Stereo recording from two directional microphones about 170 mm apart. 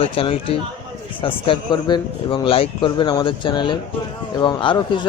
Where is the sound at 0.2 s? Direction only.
35° left (ahead or behind).